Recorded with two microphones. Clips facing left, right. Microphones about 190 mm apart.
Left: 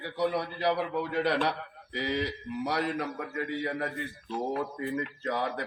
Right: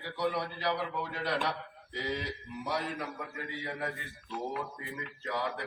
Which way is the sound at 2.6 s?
70° left (ahead or behind).